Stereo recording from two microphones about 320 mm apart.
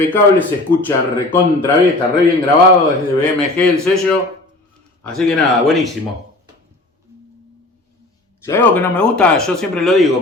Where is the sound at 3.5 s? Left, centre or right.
Centre.